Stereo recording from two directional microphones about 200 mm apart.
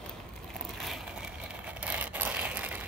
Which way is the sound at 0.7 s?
Centre (ahead or behind).